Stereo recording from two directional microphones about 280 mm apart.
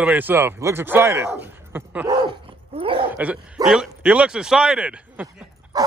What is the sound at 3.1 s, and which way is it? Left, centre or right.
Speech, centre.